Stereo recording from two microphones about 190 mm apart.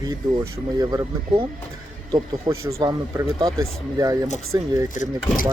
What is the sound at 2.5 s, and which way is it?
Speech, 25° right (ahead or behind).